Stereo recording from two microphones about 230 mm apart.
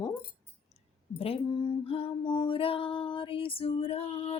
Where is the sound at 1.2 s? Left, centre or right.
Left.